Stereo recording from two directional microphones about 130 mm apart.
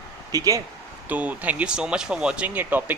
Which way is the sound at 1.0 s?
10° right (ahead or behind).